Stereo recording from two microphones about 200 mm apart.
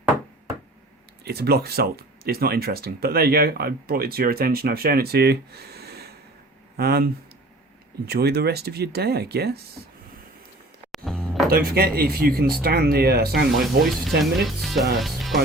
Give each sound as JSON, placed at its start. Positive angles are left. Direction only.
{"t": 1.2, "sound": "speech", "side_deg": -50}
{"t": 8.0, "sound": "speech", "side_deg": -55}
{"t": 10.9, "sound": "music", "side_deg": 0}
{"t": 11.4, "sound": "speech", "side_deg": -50}
{"t": 13.5, "sound": "speech", "side_deg": 0}